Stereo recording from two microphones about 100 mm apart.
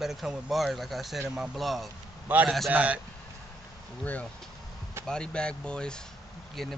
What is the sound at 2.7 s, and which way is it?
Speech, 15° right (ahead or behind).